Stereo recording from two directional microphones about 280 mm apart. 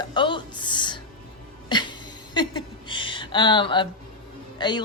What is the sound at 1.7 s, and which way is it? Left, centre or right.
Music, centre.